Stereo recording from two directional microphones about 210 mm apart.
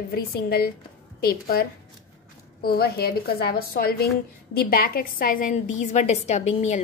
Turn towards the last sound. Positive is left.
turn(degrees=35)  # may be behind; listen again after turning